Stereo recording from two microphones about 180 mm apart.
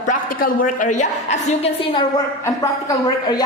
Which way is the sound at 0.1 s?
50° left (ahead or behind).